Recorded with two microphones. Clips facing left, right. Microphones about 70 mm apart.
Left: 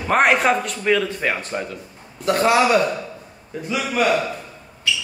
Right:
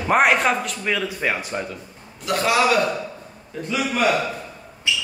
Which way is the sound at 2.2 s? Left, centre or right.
Left.